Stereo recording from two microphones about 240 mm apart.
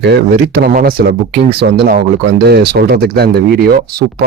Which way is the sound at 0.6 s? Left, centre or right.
Right.